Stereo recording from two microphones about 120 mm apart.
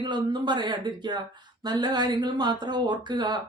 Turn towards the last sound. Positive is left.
turn(degrees=-35)  # may be behind; listen again after turning